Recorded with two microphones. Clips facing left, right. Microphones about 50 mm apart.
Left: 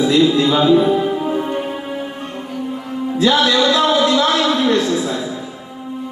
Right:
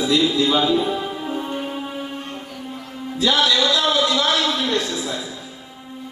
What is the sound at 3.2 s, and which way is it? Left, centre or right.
Music, left.